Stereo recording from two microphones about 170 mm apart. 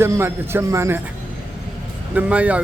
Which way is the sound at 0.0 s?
15° right (ahead or behind).